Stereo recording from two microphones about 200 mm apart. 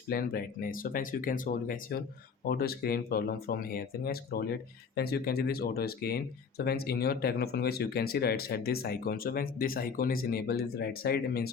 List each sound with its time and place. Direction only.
0.1 s speech: 50° left (ahead or behind)